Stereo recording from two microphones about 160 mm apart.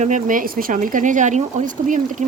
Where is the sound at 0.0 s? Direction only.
55° right (ahead or behind).